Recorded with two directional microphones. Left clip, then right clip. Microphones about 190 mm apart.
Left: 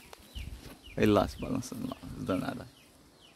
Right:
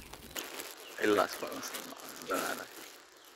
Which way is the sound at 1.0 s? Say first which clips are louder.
Left 2 dB; 15° left (ahead or behind).